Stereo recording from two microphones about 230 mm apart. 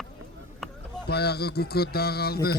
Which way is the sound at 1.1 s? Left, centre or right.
Left.